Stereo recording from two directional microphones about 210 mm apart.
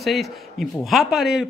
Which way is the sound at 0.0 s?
Centre (ahead or behind).